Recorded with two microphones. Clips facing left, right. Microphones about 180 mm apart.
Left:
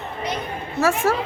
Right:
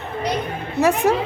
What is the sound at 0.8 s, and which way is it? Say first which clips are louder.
Speech: right 3 dB; 20° right (ahead or behind).